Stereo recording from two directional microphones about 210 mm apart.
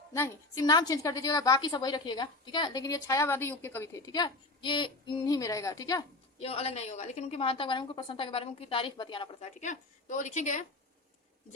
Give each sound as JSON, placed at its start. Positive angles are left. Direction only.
{"t": 0.1, "sound": "a woman's voice", "side_deg": 15}
{"t": 6.4, "sound": "a woman's voice", "side_deg": 30}